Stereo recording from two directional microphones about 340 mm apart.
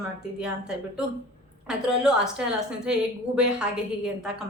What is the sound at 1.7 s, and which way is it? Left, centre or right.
A woman's voice, centre.